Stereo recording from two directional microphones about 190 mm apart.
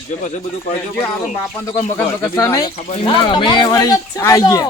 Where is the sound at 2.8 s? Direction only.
35° left (ahead or behind); by 4.6 s 15° left (ahead or behind).